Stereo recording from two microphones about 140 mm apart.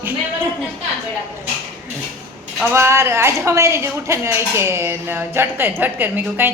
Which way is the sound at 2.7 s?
20° right (ahead or behind).